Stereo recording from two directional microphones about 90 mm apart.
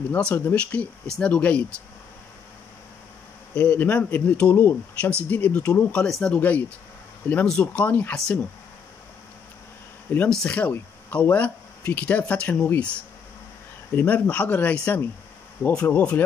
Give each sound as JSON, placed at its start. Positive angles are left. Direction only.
{"t": 0.2, "sound": "speech", "side_deg": 20}
{"t": 3.5, "sound": "speech", "side_deg": 20}
{"t": 6.3, "sound": "speech", "side_deg": 20}
{"t": 10.1, "sound": "speech", "side_deg": 20}
{"t": 13.9, "sound": "speech", "side_deg": 15}